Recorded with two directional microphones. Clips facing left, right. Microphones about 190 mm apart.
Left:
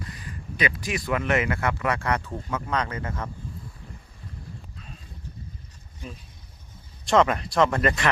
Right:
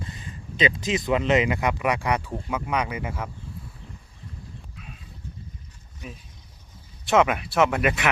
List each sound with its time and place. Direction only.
0.0 s speech: 25° right (ahead or behind)
7.0 s speech: 5° right (ahead or behind)